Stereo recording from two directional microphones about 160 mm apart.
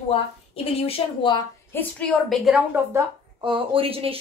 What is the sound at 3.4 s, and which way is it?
Speech, 30° right (ahead or behind).